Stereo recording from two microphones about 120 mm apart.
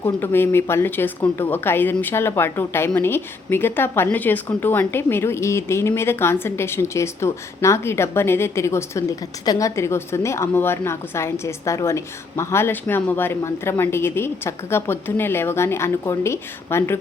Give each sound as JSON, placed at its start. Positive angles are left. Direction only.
{"t": 0.0, "sound": "a woman's voice", "side_deg": 20}